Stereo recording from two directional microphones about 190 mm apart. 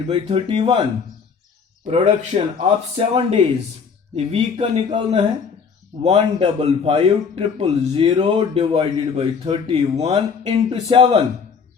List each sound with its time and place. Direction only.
0.1 s speech: 25° right (ahead or behind)
1.8 s a man's voice: 35° right (ahead or behind)